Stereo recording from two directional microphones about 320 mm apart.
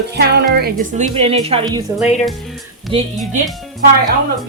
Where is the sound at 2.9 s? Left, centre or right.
Centre.